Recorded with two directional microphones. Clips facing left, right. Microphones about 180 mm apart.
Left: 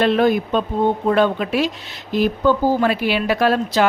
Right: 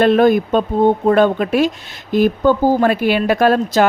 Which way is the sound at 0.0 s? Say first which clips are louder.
Right 4 dB; 50° right (ahead or behind).